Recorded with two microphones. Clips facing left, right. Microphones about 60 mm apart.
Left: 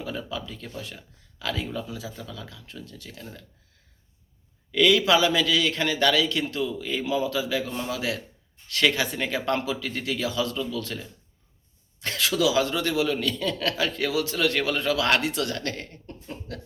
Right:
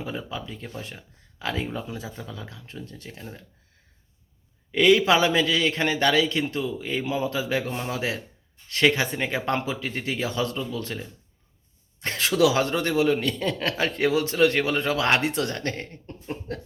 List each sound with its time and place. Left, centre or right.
0.0 s a man's voice: right
4.7 s a man's voice: right
12.4 s a man's voice: right
16.2 s speech: right